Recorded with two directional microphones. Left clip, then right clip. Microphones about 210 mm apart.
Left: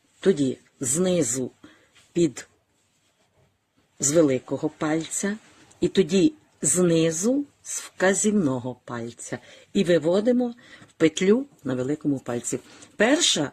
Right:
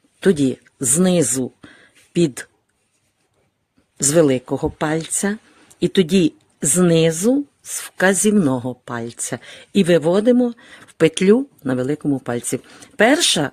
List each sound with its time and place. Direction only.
0.2 s speech: 55° right (ahead or behind)
4.1 s speech: 55° right (ahead or behind)